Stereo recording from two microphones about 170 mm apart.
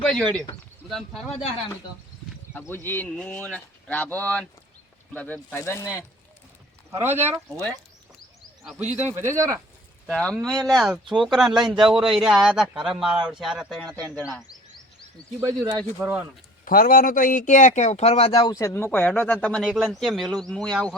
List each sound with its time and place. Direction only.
0.0 s speech: 5° left (ahead or behind)
2.5 s speech: 15° left (ahead or behind)
6.9 s speech: 15° right (ahead or behind)
9.0 s speech: 15° right (ahead or behind)
10.1 s speech: 5° left (ahead or behind)
15.4 s speech: 20° right (ahead or behind)
16.0 s speech: 10° right (ahead or behind)
16.6 s speech: 55° left (ahead or behind); by 18.3 s 40° left (ahead or behind)
18.3 s speech: 25° left (ahead or behind)
18.6 s speech: 15° left (ahead or behind)